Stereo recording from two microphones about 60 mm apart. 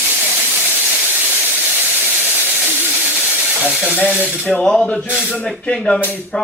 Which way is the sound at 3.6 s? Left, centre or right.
Centre.